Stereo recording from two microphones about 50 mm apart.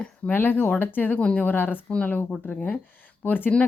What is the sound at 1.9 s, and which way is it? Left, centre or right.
Speech, left.